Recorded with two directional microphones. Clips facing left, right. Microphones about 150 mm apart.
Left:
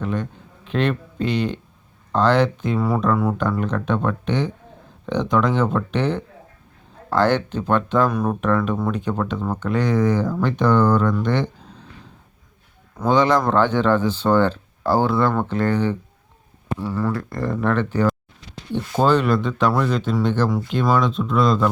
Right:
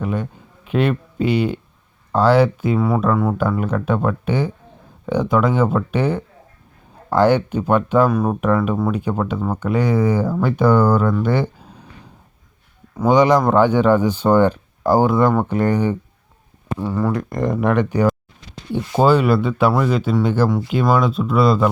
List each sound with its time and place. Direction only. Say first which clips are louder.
0.0 s speech: right 2 dB; 10° right (ahead or behind)
13.0 s speech: right 4 dB; 10° right (ahead or behind)